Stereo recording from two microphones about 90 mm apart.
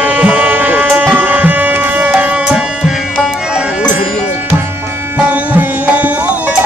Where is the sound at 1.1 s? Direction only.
20° right (ahead or behind).